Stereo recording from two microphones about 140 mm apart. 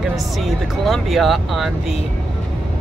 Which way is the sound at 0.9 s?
Centre (ahead or behind).